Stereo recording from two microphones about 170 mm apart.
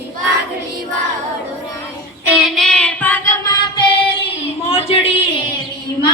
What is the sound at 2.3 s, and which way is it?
Child singing, centre (ahead or behind).